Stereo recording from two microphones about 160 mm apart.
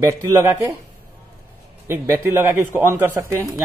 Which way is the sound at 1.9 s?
15° right (ahead or behind).